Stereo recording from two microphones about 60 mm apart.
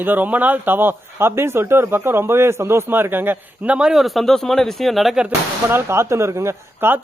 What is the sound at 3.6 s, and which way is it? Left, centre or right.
Speech, centre.